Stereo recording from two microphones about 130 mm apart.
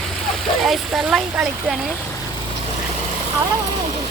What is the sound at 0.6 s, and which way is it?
Speech, 5° right (ahead or behind).